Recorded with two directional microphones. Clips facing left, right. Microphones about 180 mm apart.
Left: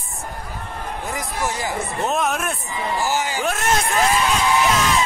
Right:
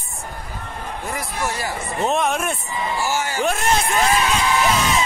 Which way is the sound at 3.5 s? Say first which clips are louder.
Right 1 dB; centre (ahead or behind).